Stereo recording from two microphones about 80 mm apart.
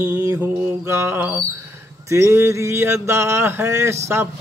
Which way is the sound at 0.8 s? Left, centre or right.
Right.